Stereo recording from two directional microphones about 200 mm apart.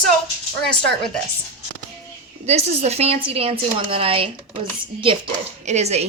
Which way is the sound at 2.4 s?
30° right (ahead or behind).